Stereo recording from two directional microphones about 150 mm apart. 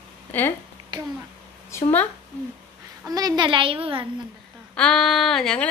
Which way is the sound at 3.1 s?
25° right (ahead or behind).